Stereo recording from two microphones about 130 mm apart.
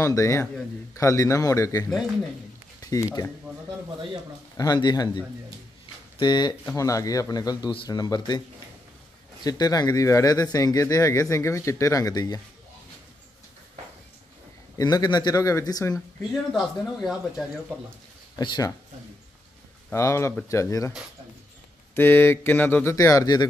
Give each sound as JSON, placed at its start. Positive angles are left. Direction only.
{"t": 0.0, "sound": "speech", "side_deg": 20}
{"t": 2.8, "sound": "a sound", "side_deg": 25}
{"t": 4.6, "sound": "speech", "side_deg": 30}
{"t": 6.6, "sound": "speech", "side_deg": 20}
{"t": 9.4, "sound": "speech", "side_deg": 30}
{"t": 14.8, "sound": "speech", "side_deg": 30}
{"t": 16.5, "sound": "speech", "side_deg": 0}
{"t": 18.4, "sound": "speech", "side_deg": 35}
{"t": 19.9, "sound": "speech", "side_deg": 20}
{"t": 21.9, "sound": "speech", "side_deg": 15}